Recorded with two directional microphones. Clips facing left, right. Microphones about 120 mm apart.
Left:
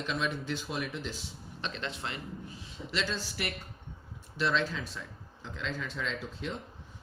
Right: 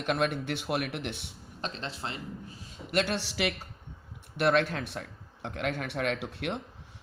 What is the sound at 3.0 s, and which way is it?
Speech, 75° right (ahead or behind).